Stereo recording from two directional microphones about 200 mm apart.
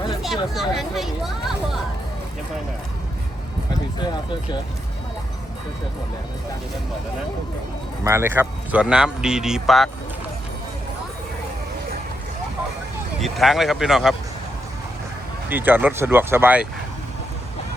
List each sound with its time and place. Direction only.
0.2 s speech: centre (ahead or behind)
8.0 s speech: 10° right (ahead or behind)
13.1 s speech: centre (ahead or behind)
15.4 s speech: 10° right (ahead or behind)